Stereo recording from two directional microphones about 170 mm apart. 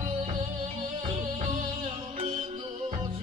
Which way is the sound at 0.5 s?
30° right (ahead or behind).